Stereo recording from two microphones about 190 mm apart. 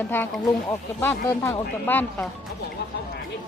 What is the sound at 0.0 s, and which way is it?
Speech, 10° left (ahead or behind).